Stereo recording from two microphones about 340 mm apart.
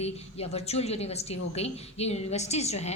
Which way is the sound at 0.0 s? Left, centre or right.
Centre.